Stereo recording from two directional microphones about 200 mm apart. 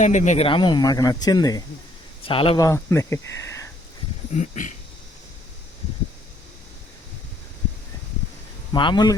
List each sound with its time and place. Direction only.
0.0 s speech: 35° left (ahead or behind); by 3.7 s 15° left (ahead or behind)
4.4 s speech: 40° left (ahead or behind)
8.7 s speech: 25° left (ahead or behind)